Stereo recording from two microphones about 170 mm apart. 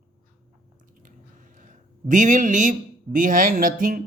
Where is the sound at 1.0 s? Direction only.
50° right (ahead or behind).